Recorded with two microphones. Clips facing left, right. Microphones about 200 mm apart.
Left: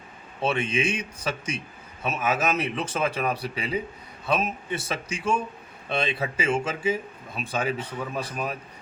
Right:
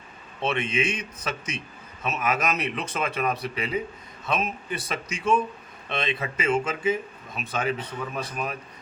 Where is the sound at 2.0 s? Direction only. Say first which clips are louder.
Left 1 dB; 25° left (ahead or behind).